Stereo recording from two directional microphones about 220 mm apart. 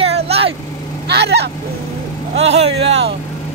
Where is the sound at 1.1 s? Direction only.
50° right (ahead or behind).